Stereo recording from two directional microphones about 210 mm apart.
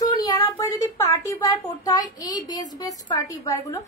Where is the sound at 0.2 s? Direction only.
15° left (ahead or behind).